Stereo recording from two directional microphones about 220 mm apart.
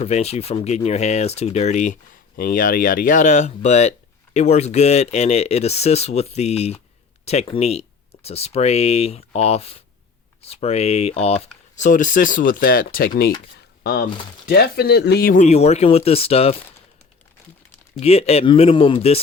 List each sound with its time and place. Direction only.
0.0 s speech: 30° left (ahead or behind)
18.0 s speech: 30° left (ahead or behind)